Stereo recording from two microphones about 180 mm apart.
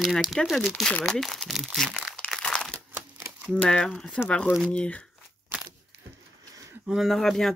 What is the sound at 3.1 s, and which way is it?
Typewriter, 10° right (ahead or behind).